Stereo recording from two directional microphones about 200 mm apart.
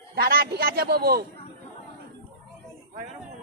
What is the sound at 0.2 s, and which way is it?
A man's voice, 50° right (ahead or behind).